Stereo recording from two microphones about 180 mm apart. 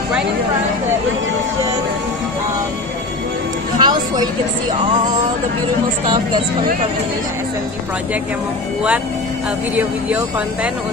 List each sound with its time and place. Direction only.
3.7 s music: 25° right (ahead or behind)
9.8 s speech: 10° right (ahead or behind)